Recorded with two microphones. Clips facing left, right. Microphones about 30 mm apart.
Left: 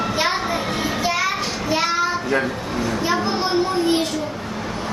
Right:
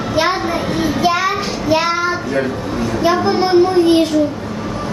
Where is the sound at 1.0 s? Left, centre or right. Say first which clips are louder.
Right 6 dB; centre.